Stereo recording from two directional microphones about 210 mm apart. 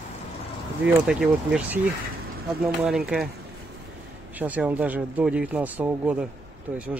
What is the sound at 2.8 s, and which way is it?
Speech, centre (ahead or behind).